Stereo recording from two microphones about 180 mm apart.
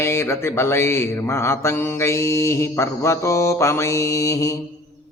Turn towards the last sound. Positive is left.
turn(degrees=20)  # may be behind; listen again after turning